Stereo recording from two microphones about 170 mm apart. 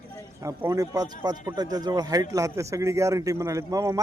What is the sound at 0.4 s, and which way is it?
A man's voice, 20° right (ahead or behind).